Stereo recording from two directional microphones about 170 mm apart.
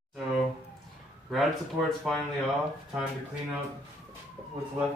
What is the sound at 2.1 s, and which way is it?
Speech, centre (ahead or behind).